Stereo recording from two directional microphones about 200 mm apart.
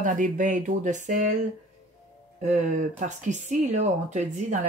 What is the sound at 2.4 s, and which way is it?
Speech, 35° right (ahead or behind).